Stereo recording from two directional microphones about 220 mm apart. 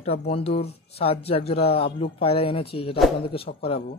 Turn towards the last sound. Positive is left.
turn(degrees=25)  # may be behind; listen again after turning